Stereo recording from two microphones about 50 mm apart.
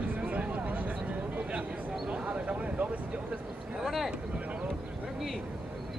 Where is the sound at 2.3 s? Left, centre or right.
Right.